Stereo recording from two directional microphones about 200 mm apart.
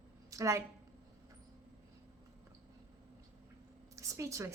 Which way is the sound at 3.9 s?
15° right (ahead or behind).